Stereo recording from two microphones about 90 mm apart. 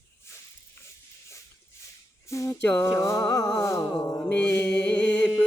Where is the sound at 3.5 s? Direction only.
35° left (ahead or behind).